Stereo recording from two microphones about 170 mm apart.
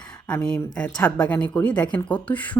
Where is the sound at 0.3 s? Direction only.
10° left (ahead or behind).